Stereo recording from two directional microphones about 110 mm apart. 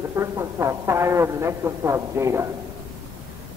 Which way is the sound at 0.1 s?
25° right (ahead or behind).